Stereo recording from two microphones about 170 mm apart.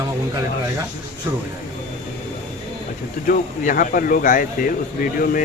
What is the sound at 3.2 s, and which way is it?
Speech, 55° left (ahead or behind).